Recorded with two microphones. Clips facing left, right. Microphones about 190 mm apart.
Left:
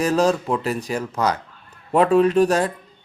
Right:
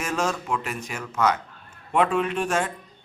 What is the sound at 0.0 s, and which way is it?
Speech, 35° left (ahead or behind).